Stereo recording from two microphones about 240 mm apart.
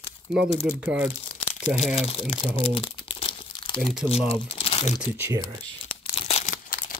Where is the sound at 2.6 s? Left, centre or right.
Left.